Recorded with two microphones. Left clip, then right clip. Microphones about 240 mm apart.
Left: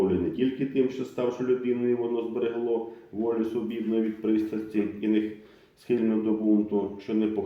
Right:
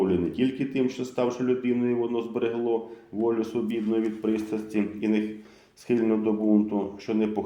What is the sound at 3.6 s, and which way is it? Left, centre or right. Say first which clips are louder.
Speech: right 1 dB; right.